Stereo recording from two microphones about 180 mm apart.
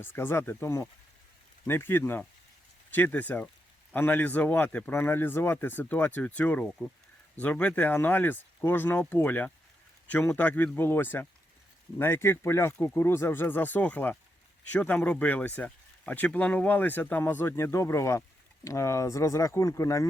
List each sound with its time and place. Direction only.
0.0 s speech: 10° left (ahead or behind)